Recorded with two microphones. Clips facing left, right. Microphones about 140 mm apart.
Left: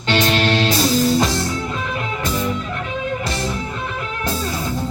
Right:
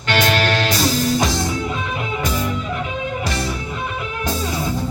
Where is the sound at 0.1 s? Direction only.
25° left (ahead or behind).